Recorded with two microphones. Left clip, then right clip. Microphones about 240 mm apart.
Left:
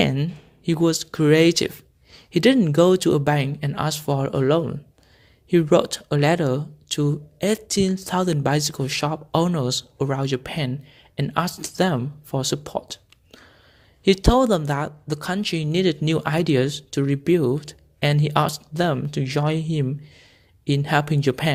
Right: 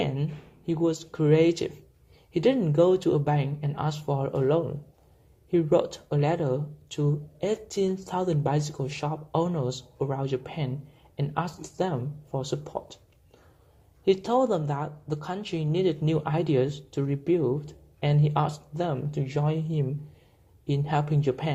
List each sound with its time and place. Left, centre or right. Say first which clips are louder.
0.0 s speech: left 8 dB; left